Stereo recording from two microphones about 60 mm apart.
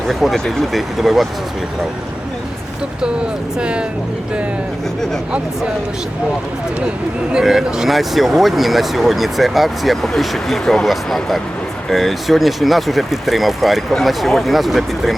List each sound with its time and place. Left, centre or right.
0.1 s speech: centre
3.6 s speech: centre
7.3 s speech: centre